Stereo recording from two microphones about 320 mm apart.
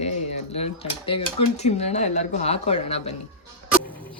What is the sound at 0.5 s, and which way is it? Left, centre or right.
Speech, centre.